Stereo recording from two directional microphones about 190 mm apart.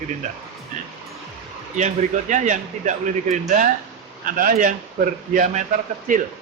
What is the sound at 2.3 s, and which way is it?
Speech, 40° right (ahead or behind).